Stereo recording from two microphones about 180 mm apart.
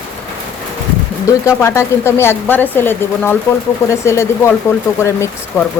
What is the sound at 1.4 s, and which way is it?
A woman's voice, 15° left (ahead or behind).